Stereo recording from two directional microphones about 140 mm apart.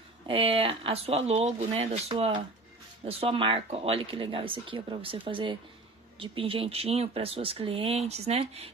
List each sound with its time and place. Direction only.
0.3 s speech: 40° right (ahead or behind)